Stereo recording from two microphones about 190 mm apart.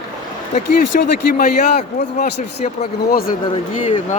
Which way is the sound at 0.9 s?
45° left (ahead or behind).